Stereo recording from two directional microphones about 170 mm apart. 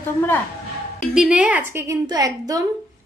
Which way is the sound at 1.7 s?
15° right (ahead or behind).